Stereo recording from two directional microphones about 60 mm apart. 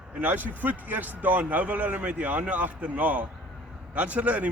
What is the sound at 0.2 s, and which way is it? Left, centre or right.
A man's voice, right.